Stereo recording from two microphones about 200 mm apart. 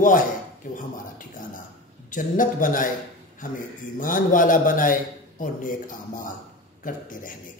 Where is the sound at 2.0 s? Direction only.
40° left (ahead or behind).